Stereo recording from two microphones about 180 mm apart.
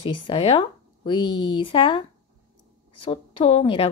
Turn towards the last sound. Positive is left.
turn(degrees=30)  # may be behind; listen again after turning